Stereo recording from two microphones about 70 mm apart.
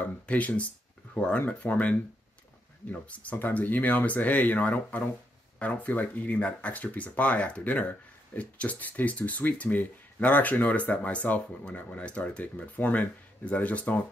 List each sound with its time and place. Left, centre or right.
0.0 s speech: left